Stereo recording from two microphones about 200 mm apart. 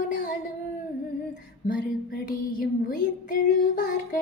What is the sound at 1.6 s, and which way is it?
Female singing, 45° left (ahead or behind).